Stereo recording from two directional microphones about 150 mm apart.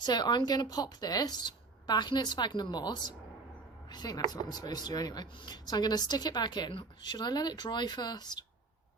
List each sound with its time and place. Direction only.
0.0 s a woman's voice: 30° left (ahead or behind)